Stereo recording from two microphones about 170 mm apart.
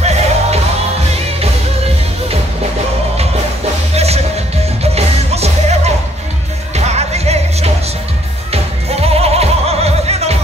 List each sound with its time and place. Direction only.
0.0 s music: 40° right (ahead or behind)
3.9 s music: 40° right (ahead or behind)
9.0 s music: 35° right (ahead or behind)